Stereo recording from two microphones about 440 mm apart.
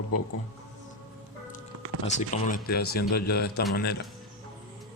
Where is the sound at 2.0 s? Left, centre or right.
Centre.